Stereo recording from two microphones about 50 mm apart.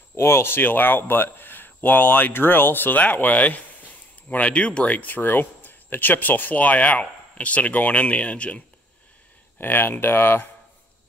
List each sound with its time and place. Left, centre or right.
0.1 s speech: left
9.6 s speech: left